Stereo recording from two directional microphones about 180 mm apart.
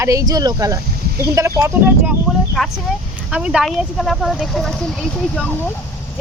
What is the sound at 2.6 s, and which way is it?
Speech, centre (ahead or behind).